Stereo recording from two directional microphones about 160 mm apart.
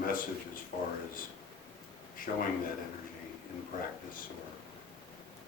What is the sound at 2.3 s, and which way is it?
Speech, 65° left (ahead or behind).